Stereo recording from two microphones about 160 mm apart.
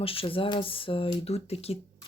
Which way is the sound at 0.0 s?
35° left (ahead or behind).